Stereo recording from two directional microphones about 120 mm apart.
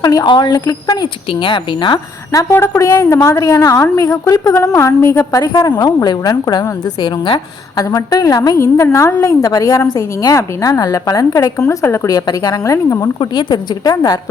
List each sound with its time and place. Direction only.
0.0 s speech: 30° left (ahead or behind)
2.3 s a woman's voice: 25° left (ahead or behind)
7.9 s a woman's voice: 30° left (ahead or behind)
13.1 s speech: 40° left (ahead or behind)